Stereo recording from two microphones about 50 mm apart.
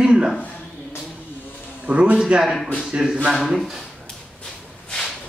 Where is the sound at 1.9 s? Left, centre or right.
Right; by 3.8 s centre.